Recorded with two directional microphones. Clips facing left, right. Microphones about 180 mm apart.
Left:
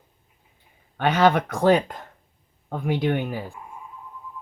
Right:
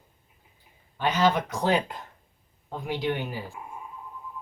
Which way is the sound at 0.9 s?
60° left (ahead or behind).